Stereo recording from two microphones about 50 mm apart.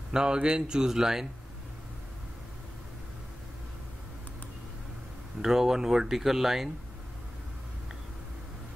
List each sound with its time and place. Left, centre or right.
0.1 s speech: centre
5.4 s speech: centre